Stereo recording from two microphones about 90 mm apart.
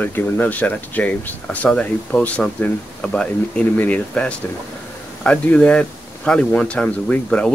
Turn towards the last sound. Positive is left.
turn(degrees=10)  # may be behind; listen again after turning